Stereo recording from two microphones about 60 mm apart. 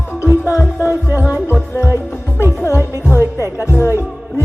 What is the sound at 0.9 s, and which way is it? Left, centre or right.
Music, right.